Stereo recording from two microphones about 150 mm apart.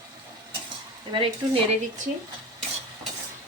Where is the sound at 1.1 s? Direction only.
35° right (ahead or behind).